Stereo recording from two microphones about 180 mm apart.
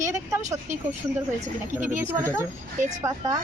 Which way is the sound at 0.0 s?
15° right (ahead or behind).